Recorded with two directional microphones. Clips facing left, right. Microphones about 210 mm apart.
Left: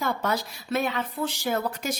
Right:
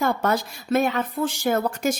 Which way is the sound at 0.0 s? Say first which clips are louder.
Right 5 dB; 50° right (ahead or behind).